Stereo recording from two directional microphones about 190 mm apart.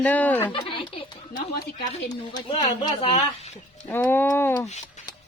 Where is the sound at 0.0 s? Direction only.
10° left (ahead or behind).